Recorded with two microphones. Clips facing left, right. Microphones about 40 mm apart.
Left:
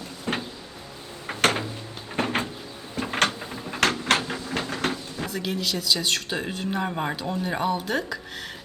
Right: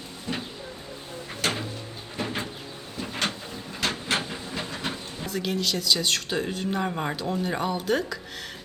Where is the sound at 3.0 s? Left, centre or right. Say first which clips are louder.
Left 6 dB; left.